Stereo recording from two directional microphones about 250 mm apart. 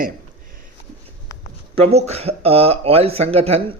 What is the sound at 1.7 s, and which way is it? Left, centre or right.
Speech, right.